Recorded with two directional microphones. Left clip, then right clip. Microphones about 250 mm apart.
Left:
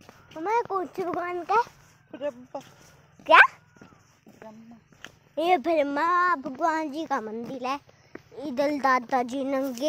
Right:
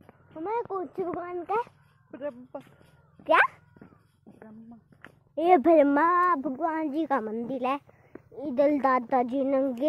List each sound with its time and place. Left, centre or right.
0.3 s speech: centre
1.4 s speech: centre
5.4 s a woman's voice: right
8.4 s speech: centre
8.6 s speech: centre